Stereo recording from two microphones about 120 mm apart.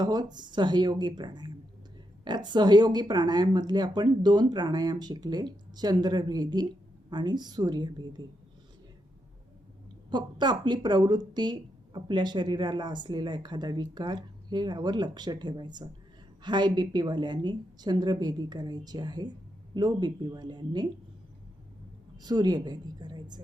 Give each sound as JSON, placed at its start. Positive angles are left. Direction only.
{"t": 0.0, "sound": "speech", "side_deg": -35}
{"t": 10.1, "sound": "speech", "side_deg": -40}
{"t": 22.2, "sound": "speech", "side_deg": -35}